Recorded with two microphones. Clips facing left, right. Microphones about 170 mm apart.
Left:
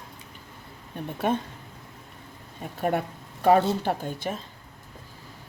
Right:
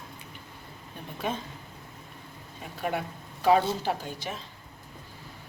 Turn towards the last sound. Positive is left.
turn(degrees=50)  # may be behind; listen again after turning